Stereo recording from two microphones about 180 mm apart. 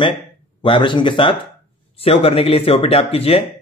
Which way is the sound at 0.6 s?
25° left (ahead or behind).